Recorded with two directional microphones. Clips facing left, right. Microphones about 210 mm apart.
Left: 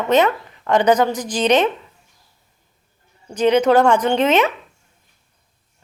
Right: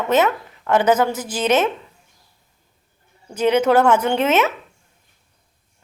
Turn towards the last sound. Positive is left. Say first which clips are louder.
# left 2 dB
turn(degrees=-10)  # may be behind; listen again after turning